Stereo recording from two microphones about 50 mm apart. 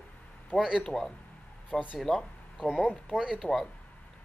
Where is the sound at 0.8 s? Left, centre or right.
Centre.